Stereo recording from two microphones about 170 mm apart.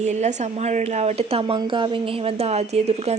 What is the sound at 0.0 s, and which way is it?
Speech, 45° right (ahead or behind).